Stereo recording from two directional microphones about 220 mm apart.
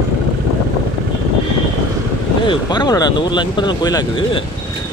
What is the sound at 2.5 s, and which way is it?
Speech, 20° left (ahead or behind).